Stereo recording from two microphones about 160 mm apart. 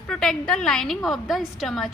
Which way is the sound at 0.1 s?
5° left (ahead or behind).